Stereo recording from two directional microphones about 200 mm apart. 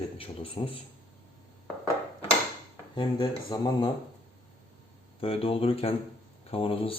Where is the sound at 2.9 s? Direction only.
20° left (ahead or behind).